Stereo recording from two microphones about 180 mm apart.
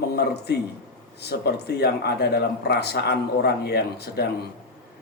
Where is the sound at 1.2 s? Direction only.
65° left (ahead or behind).